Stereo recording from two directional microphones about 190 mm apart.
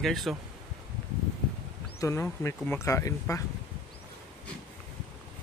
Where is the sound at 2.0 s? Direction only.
15° left (ahead or behind).